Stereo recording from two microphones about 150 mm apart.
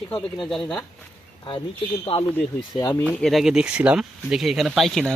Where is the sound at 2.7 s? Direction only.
25° left (ahead or behind).